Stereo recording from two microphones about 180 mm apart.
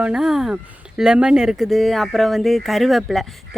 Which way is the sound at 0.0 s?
5° right (ahead or behind).